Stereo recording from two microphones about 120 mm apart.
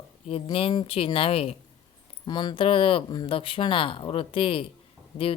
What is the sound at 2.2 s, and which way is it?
Speech, 40° left (ahead or behind).